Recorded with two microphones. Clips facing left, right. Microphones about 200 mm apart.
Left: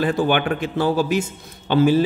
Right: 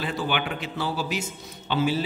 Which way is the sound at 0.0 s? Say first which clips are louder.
Left 9 dB; 50° left (ahead or behind).